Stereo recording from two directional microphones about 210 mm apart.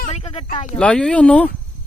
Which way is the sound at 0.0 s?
30° left (ahead or behind).